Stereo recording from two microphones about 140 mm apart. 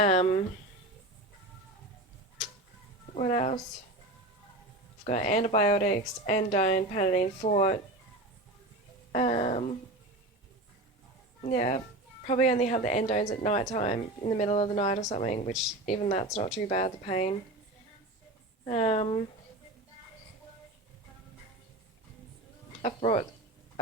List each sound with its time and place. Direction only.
0.0 s speech: 50° left (ahead or behind)
3.2 s speech: 50° left (ahead or behind)
5.0 s speech: 55° left (ahead or behind)
9.1 s speech: 45° left (ahead or behind)
11.4 s speech: 55° left (ahead or behind)
18.6 s speech: 45° left (ahead or behind)
22.8 s speech: 50° left (ahead or behind)